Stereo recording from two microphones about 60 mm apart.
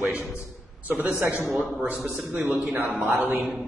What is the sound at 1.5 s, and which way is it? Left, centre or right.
Speech, centre.